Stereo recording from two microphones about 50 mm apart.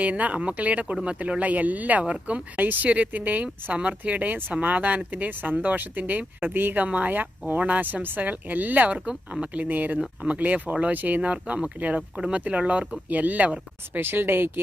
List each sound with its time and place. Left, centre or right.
0.0 s speech: right
2.6 s speech: right
6.8 s speech: right
11.9 s speech: centre
12.3 s speech: right
14.0 s speech: right